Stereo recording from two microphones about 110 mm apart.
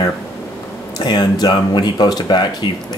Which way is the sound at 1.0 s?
35° left (ahead or behind).